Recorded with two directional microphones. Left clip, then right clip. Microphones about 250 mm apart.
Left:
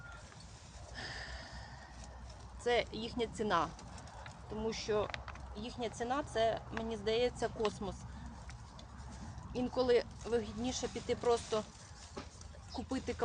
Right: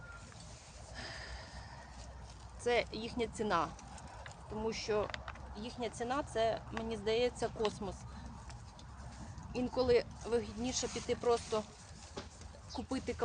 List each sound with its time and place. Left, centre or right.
0.9 s a sound: centre
2.6 s speech: centre
9.5 s speech: centre
12.9 s speech: centre